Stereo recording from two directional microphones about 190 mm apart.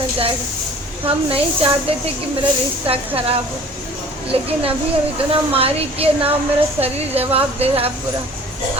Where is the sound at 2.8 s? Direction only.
30° right (ahead or behind).